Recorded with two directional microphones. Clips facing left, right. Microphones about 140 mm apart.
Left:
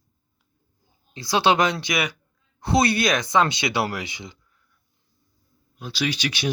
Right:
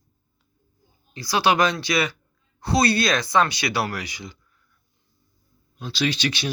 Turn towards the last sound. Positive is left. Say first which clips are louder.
# right 1 dB
turn(degrees=10)  # may be behind; listen again after turning